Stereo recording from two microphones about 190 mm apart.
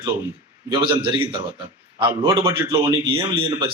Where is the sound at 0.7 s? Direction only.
25° right (ahead or behind).